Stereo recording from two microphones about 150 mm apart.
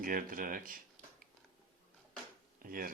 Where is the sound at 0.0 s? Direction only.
70° right (ahead or behind).